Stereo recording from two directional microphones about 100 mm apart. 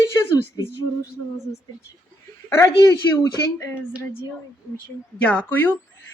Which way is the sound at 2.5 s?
25° left (ahead or behind).